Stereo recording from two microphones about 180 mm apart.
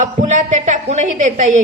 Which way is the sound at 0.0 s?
45° right (ahead or behind).